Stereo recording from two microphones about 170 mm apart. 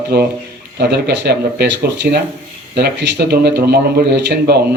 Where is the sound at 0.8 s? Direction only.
75° right (ahead or behind).